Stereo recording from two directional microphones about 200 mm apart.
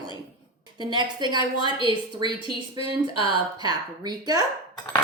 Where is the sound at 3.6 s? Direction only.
20° right (ahead or behind).